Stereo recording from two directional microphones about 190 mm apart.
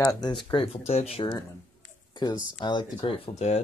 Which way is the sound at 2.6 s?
25° left (ahead or behind).